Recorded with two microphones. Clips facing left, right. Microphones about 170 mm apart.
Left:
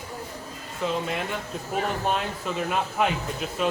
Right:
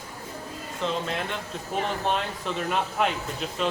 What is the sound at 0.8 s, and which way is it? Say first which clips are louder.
Speech: left 1 dB; 5° left (ahead or behind).